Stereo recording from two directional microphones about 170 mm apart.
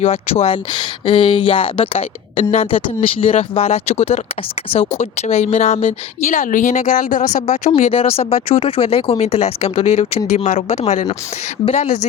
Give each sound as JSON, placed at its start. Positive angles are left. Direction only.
{"t": 0.0, "sound": "a woman's voice", "side_deg": 35}
{"t": 7.7, "sound": "a woman's voice", "side_deg": 35}